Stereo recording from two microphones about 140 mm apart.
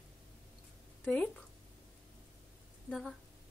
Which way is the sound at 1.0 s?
5° left (ahead or behind).